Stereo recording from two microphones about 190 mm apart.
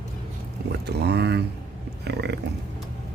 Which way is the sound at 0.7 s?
60° right (ahead or behind).